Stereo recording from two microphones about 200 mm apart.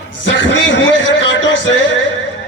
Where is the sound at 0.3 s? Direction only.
65° left (ahead or behind).